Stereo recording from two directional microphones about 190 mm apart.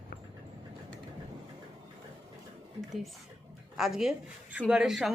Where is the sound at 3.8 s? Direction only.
Centre (ahead or behind).